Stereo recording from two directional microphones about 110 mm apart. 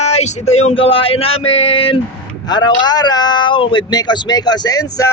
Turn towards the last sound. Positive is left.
turn(degrees=35)  # may be behind; listen again after turning